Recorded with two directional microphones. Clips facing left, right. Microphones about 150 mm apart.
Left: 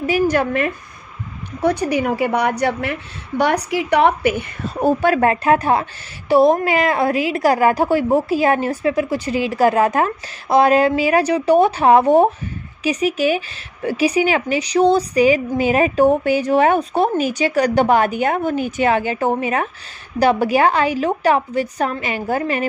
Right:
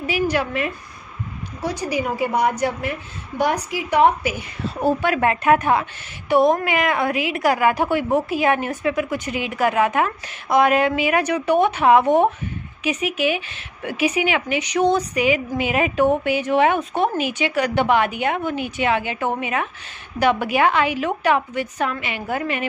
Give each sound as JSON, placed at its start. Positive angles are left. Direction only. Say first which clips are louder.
{"t": 0.0, "sound": "a woman's voice", "louder": "left 5 dB", "side_deg": 45}
{"t": 5.0, "sound": "a woman's voice", "louder": "left 4 dB", "side_deg": 35}